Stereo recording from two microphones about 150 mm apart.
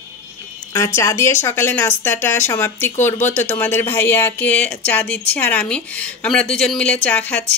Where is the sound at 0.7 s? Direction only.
20° left (ahead or behind).